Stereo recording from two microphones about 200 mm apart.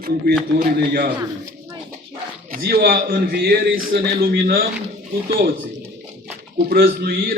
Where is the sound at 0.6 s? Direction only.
50° right (ahead or behind).